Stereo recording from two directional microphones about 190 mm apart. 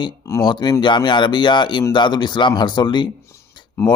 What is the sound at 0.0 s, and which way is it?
Speech, 20° left (ahead or behind).